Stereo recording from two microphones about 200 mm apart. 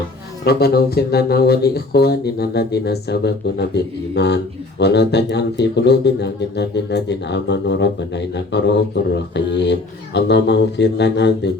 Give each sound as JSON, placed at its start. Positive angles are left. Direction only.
{"t": 0.4, "sound": "speech", "side_deg": 50}